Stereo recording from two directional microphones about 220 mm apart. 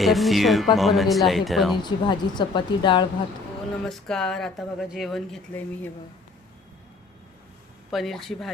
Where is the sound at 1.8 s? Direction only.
20° left (ahead or behind).